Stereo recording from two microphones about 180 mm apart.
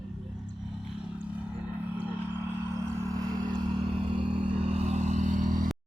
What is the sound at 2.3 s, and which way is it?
Vehicle, 15° right (ahead or behind).